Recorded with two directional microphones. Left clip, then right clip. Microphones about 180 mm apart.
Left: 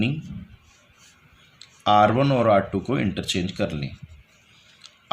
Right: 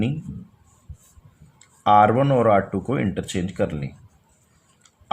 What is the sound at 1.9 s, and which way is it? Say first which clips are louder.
Speech: right 2 dB; 55° right (ahead or behind).